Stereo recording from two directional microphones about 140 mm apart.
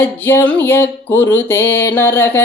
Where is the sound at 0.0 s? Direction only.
15° left (ahead or behind).